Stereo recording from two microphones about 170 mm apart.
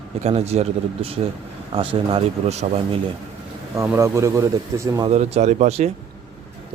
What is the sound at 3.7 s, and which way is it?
Speech, 15° right (ahead or behind).